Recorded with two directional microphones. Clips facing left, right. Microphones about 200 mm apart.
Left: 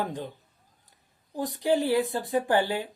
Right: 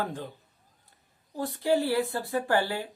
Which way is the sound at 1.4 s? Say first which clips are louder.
Left 1 dB; 15° left (ahead or behind).